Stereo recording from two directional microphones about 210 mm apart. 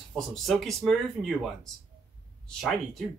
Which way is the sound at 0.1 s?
Centre (ahead or behind).